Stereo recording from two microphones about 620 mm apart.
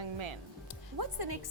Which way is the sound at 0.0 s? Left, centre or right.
Right.